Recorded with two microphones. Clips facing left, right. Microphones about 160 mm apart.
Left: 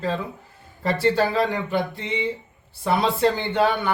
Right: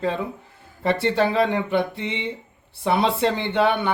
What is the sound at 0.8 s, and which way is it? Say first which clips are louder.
Speech: even; 25° right (ahead or behind).